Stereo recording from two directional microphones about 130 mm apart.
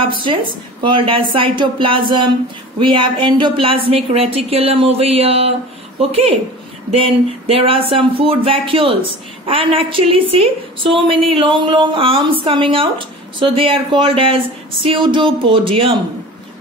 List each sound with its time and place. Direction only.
0.0 s speech: 40° right (ahead or behind)